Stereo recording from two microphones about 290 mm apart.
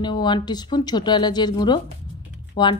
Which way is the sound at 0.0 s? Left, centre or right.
Centre.